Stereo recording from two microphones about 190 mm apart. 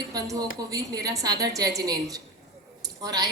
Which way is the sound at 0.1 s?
20° right (ahead or behind).